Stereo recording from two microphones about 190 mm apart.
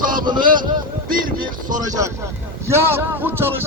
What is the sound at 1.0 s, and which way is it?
Speech, 45° right (ahead or behind).